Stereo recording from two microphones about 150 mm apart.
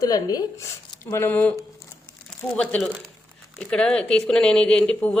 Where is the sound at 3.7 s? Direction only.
5° left (ahead or behind).